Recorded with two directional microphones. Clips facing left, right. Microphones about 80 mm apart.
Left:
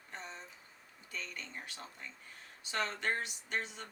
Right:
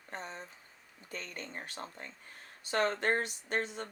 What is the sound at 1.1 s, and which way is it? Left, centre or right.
Speech, right.